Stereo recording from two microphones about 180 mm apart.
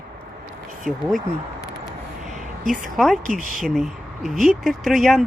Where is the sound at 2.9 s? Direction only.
Centre (ahead or behind).